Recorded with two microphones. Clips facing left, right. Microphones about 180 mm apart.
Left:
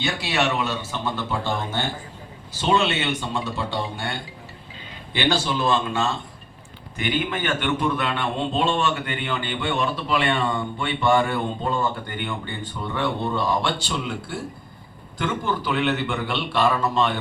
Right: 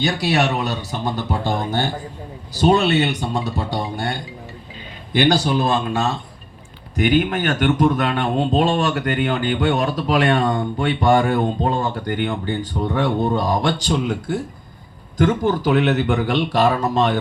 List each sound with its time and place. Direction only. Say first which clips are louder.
0.0 s speech: right 5 dB; 40° right (ahead or behind)